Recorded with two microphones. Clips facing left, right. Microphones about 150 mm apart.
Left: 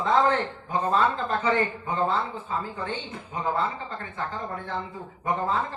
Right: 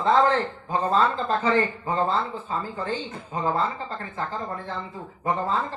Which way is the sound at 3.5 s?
35° right (ahead or behind).